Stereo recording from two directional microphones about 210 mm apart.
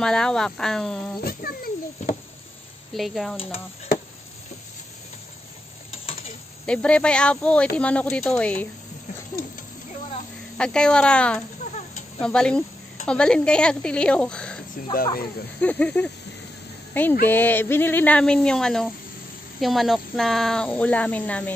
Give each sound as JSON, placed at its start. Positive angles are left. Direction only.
{"t": 0.0, "sound": "speech", "side_deg": 5}
{"t": 1.2, "sound": "a sound", "side_deg": 45}
{"t": 2.9, "sound": "speech", "side_deg": 0}
{"t": 6.6, "sound": "speech", "side_deg": 5}
{"t": 10.6, "sound": "speech", "side_deg": 5}
{"t": 15.6, "sound": "speech", "side_deg": 5}